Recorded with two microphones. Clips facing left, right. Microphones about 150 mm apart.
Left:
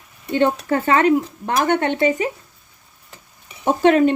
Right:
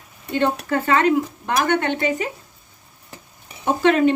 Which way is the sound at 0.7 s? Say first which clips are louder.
Left 1 dB; 35° left (ahead or behind).